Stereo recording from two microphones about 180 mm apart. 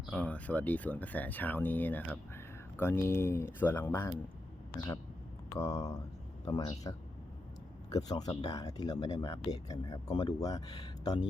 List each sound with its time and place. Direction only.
0.0 s speech: 5° left (ahead or behind)
5.5 s speech: 15° left (ahead or behind)